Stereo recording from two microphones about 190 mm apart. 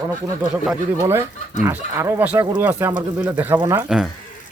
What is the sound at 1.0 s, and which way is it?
Speech, 15° right (ahead or behind).